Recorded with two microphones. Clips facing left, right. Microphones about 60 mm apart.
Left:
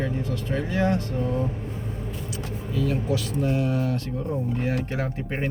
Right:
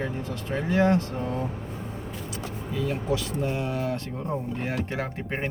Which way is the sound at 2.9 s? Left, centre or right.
Right.